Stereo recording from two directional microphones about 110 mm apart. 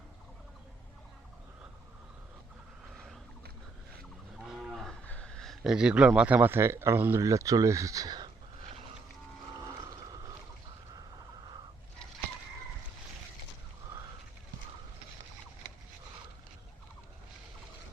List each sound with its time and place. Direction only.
2.9 s a sound: 5° left (ahead or behind)
4.5 s cattle: centre (ahead or behind)
5.0 s speech: 10° left (ahead or behind); by 8.3 s 35° right (ahead or behind)
9.6 s boat: 35° right (ahead or behind)